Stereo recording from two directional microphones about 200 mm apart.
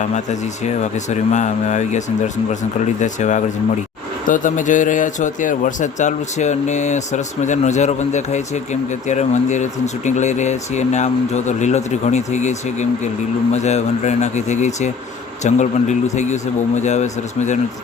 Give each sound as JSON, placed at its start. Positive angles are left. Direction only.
{"t": 0.3, "sound": "speech", "side_deg": 35}